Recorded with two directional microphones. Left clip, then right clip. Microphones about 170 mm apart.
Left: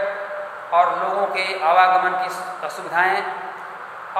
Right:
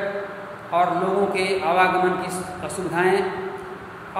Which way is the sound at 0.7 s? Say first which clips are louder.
Left 2 dB; 20° right (ahead or behind).